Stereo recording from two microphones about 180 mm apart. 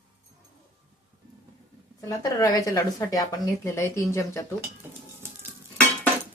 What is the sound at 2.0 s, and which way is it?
Speech, 20° left (ahead or behind).